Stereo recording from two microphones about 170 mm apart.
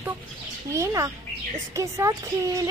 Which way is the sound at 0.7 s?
15° right (ahead or behind).